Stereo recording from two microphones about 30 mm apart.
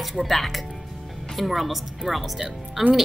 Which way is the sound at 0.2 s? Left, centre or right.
Centre.